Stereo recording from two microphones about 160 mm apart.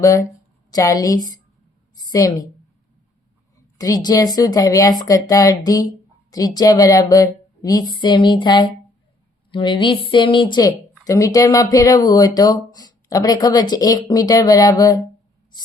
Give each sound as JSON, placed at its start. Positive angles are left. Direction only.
{"t": 0.0, "sound": "a woman's voice", "side_deg": 20}
{"t": 3.8, "sound": "a woman's voice", "side_deg": 25}